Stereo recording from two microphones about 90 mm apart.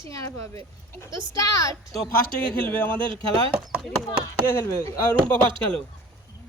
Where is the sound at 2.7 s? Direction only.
20° left (ahead or behind).